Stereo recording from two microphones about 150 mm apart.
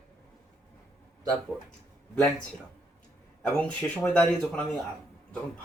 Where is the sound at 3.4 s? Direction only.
10° left (ahead or behind).